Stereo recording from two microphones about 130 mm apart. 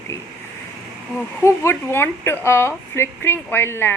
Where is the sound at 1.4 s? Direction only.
20° left (ahead or behind).